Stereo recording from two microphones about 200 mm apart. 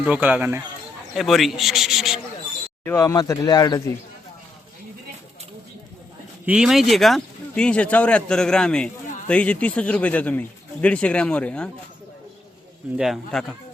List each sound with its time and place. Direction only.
0.0 s speech: 5° right (ahead or behind)
2.8 s a man's voice: 15° left (ahead or behind)
6.4 s a man's voice: 5° right (ahead or behind)
13.0 s speech: centre (ahead or behind)